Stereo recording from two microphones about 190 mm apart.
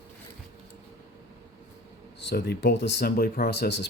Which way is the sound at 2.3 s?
55° left (ahead or behind).